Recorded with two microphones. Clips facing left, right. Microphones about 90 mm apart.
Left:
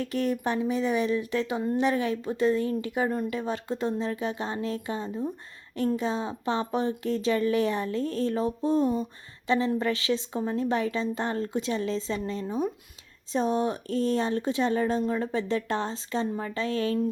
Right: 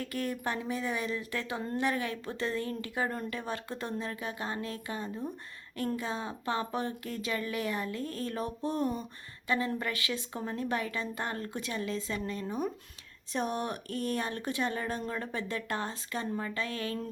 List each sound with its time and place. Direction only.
0.0 s speech: 25° left (ahead or behind)